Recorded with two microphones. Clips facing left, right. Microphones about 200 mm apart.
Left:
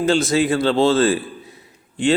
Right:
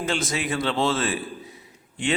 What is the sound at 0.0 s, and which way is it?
A man's voice, 30° left (ahead or behind).